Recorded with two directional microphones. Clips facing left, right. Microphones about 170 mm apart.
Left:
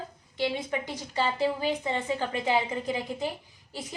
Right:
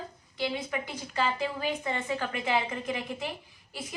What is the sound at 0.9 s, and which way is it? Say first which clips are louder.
Speech: even; 35° left (ahead or behind).